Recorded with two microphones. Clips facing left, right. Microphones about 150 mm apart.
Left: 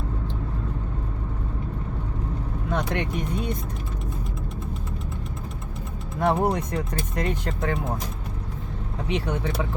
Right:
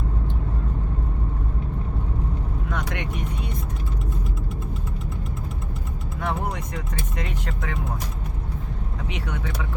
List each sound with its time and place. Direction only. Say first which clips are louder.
2.6 s vehicle: left 5 dB; 30° left (ahead or behind)
6.1 s speech: left 7 dB; 35° left (ahead or behind)
9.0 s speech: left 6 dB; 30° left (ahead or behind)